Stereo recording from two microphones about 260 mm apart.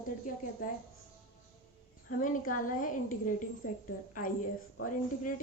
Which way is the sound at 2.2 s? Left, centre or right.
Left.